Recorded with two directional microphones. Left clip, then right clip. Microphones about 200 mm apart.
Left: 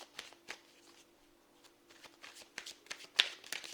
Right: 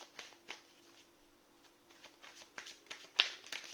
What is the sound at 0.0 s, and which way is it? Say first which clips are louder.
Shuffling cards: left 2 dB; 45° left (ahead or behind).